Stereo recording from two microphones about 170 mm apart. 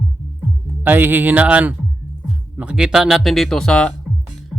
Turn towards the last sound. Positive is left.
turn(degrees=5)  # may be behind; listen again after turning